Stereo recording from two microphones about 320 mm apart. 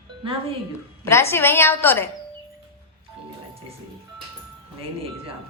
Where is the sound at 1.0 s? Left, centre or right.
Centre.